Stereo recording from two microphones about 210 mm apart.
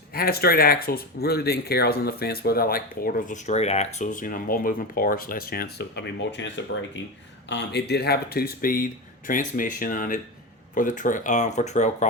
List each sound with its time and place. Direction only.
0.1 s speech: 45° left (ahead or behind)